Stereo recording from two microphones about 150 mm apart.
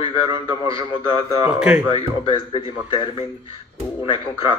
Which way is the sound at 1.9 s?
35° left (ahead or behind).